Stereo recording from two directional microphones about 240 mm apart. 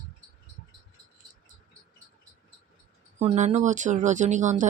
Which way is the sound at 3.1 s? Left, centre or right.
Right.